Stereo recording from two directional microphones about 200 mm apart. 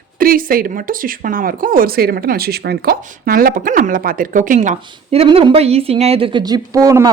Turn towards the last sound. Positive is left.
turn(degrees=-15)  # may be behind; listen again after turning